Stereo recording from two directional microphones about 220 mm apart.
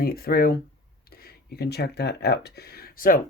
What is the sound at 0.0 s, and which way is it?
Speech, 45° left (ahead or behind).